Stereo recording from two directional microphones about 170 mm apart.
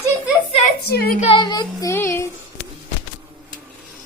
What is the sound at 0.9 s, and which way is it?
Speech, 65° left (ahead or behind).